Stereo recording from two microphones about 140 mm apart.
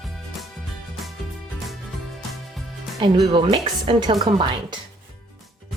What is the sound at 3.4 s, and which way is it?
Speech, 35° right (ahead or behind).